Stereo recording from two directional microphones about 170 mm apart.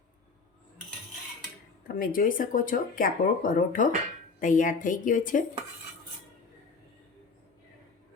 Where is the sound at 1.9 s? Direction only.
55° left (ahead or behind).